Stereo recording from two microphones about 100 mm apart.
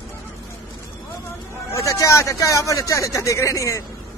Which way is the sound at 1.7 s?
30° left (ahead or behind).